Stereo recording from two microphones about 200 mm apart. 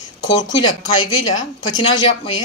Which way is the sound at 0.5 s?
25° left (ahead or behind).